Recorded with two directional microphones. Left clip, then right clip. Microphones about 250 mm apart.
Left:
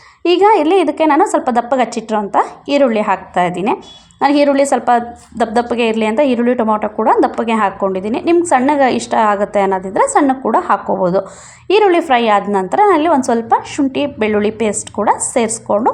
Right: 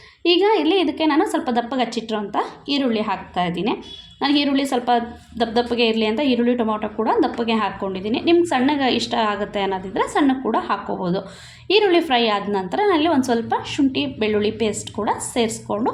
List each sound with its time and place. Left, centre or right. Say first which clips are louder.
0.3 s a woman's voice: left 7 dB; left